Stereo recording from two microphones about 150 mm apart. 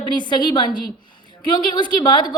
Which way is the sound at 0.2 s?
30° left (ahead or behind).